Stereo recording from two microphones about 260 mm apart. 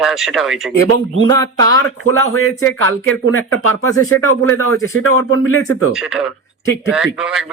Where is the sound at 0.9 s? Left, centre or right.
Right.